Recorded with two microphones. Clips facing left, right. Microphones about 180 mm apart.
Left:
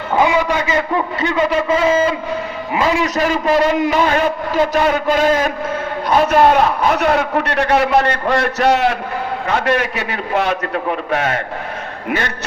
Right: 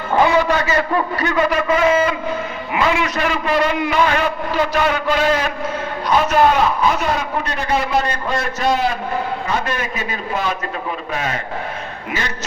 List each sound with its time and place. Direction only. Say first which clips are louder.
0.2 s a man's voice: even; 15° left (ahead or behind); by 11.3 s 60° left (ahead or behind)